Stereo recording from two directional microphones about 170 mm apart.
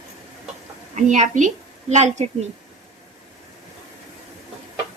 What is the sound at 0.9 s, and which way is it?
A woman's voice, 45° right (ahead or behind).